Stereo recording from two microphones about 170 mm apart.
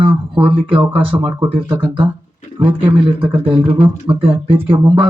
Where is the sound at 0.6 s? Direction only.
30° right (ahead or behind).